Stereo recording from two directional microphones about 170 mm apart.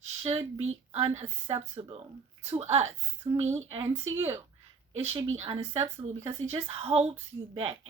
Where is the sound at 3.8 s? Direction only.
15° right (ahead or behind).